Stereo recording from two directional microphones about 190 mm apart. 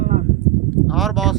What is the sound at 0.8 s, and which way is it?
Speech, centre (ahead or behind).